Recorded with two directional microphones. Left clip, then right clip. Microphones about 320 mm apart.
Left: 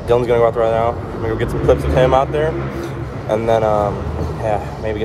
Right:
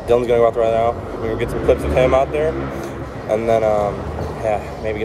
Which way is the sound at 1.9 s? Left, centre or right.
Centre.